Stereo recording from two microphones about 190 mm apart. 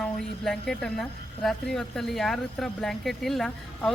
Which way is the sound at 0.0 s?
Centre (ahead or behind).